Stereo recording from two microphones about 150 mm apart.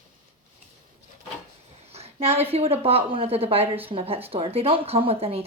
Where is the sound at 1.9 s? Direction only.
40° right (ahead or behind).